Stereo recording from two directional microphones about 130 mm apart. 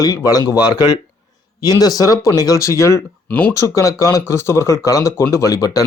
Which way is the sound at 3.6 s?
25° left (ahead or behind).